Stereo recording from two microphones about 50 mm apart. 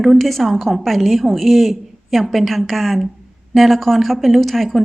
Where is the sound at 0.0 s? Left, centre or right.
Centre.